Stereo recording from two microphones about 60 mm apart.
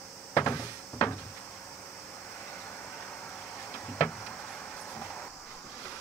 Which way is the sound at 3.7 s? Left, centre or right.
Centre.